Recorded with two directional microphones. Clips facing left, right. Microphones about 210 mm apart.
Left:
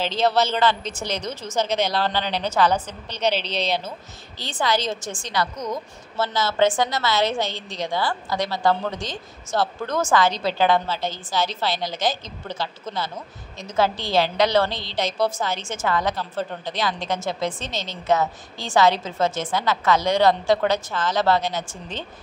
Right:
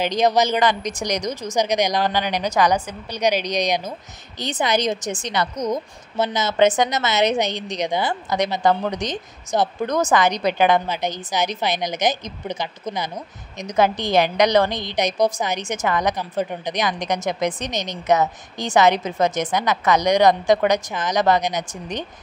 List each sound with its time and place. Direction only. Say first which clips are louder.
0.0 s a woman's voice: right 3 dB; 15° right (ahead or behind)